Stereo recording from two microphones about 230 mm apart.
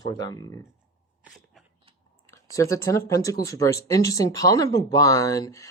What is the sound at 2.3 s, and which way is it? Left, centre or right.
Speech, centre.